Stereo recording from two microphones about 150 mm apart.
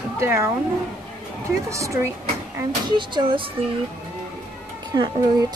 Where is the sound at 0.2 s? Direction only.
20° right (ahead or behind).